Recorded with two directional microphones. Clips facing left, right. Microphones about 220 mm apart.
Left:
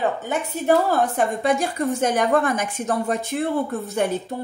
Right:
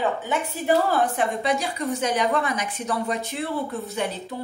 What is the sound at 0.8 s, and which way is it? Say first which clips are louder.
A woman's voice: left 2 dB; 45° left (ahead or behind).